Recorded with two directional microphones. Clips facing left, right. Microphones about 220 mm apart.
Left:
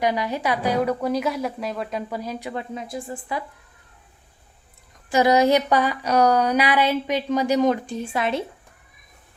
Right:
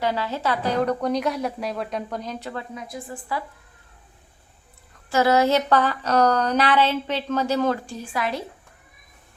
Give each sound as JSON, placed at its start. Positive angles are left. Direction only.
{"t": 0.0, "sound": "speech", "side_deg": 15}
{"t": 2.7, "sound": "a woman's voice", "side_deg": 25}
{"t": 5.0, "sound": "speech", "side_deg": 15}